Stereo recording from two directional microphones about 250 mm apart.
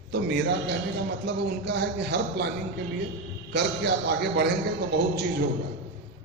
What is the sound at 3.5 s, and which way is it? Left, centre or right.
Speech, right.